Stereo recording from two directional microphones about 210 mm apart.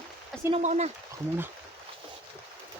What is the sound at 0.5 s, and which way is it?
Speech, 30° right (ahead or behind).